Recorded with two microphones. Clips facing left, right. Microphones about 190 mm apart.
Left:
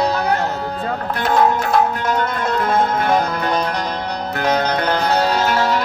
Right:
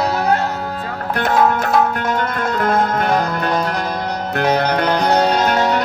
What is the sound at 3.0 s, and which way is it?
Music, centre (ahead or behind).